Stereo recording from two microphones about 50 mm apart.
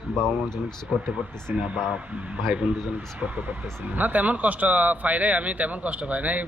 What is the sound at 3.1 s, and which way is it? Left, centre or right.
Speech, right.